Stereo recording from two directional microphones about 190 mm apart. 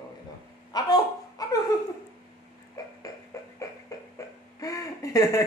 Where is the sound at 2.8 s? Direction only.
20° left (ahead or behind).